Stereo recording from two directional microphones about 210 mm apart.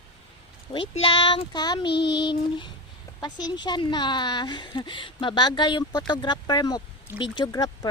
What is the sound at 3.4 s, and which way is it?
Speech, 20° left (ahead or behind).